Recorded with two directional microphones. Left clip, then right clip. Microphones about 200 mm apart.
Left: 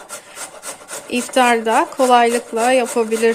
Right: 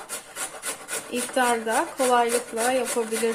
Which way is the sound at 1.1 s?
50° left (ahead or behind).